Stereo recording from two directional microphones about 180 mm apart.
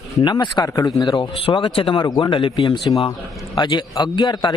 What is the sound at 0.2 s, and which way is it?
Speech, 25° left (ahead or behind).